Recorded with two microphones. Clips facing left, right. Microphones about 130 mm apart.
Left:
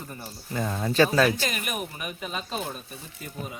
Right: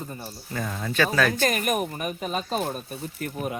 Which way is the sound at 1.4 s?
50° right (ahead or behind).